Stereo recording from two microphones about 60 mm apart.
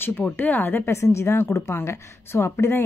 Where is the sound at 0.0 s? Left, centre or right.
Left.